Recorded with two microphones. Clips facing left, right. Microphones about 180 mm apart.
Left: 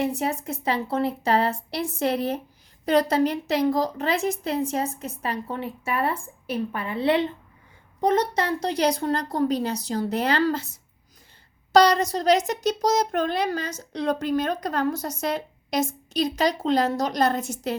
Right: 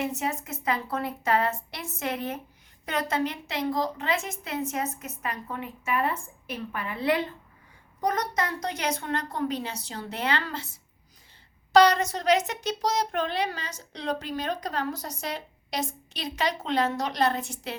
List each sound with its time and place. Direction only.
0.0 s a woman's voice: 35° left (ahead or behind)
11.7 s a child's voice: 40° left (ahead or behind)